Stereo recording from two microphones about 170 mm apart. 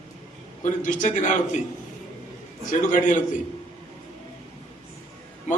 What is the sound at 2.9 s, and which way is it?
Speech, 50° left (ahead or behind).